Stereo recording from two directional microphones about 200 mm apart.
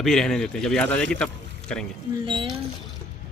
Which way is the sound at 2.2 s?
25° right (ahead or behind).